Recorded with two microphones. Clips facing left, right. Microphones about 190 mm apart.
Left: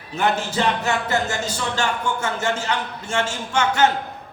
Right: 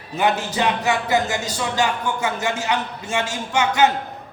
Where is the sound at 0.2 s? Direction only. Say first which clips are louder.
Right 1 dB; 15° right (ahead or behind).